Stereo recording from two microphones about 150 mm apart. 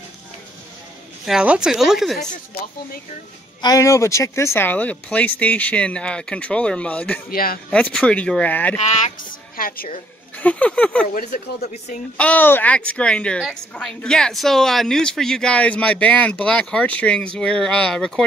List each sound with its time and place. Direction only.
1.2 s speech: 5° right (ahead or behind)
3.6 s a woman's voice: 20° left (ahead or behind)
7.2 s speech: 75° left (ahead or behind)
7.7 s a woman's voice: 10° left (ahead or behind)
8.7 s a sound: 50° left (ahead or behind)
9.6 s a woman's voice: 70° left (ahead or behind)
10.3 s a woman's voice: 10° left (ahead or behind)
12.2 s a woman's voice: 10° left (ahead or behind)